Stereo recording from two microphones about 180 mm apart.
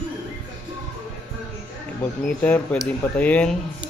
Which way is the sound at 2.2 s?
10° left (ahead or behind).